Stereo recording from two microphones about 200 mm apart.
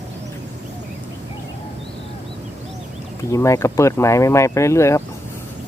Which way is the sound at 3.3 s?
15° left (ahead or behind).